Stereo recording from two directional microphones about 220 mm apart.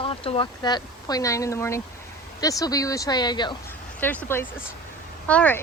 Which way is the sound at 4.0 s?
10° left (ahead or behind).